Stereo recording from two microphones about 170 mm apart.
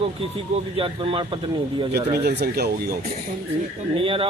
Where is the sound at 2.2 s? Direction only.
65° right (ahead or behind).